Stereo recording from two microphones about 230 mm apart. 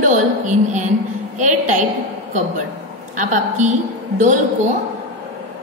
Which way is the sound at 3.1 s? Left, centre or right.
Right.